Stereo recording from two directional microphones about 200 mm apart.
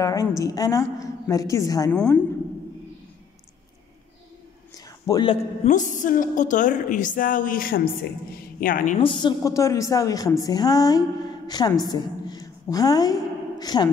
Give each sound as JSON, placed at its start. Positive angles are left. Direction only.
{"t": 0.0, "sound": "a woman's voice", "side_deg": 15}
{"t": 4.7, "sound": "speech", "side_deg": 20}
{"t": 5.7, "sound": "a woman's voice", "side_deg": 40}
{"t": 9.0, "sound": "a woman's voice", "side_deg": 25}